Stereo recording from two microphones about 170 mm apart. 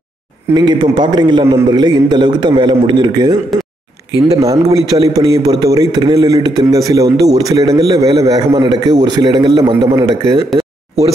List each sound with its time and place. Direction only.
0.6 s a man's voice: 25° right (ahead or behind)